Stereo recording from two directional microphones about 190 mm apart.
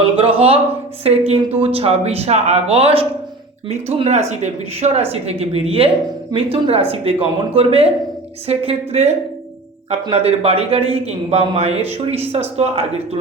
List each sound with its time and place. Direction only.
0.2 s speech: 30° right (ahead or behind)